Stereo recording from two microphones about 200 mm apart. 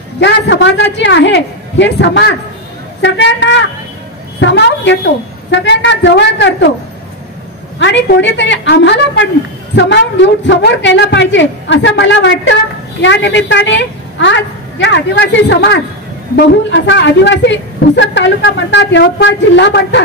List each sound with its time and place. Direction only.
0.2 s a woman's voice: 65° left (ahead or behind)
7.8 s a woman's voice: 60° left (ahead or behind)